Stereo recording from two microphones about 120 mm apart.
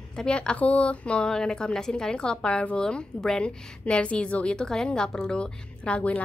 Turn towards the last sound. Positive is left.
turn(degrees=10)  # may be behind; listen again after turning